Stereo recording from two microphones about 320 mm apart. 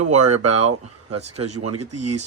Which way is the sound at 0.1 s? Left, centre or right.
Right.